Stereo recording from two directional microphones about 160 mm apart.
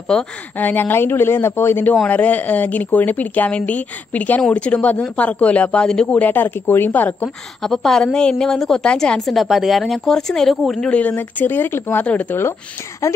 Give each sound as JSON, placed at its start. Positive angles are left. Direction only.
{"t": 0.1, "sound": "speech", "side_deg": 10}